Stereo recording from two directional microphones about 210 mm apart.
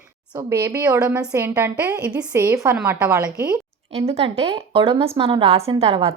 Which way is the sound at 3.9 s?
30° right (ahead or behind).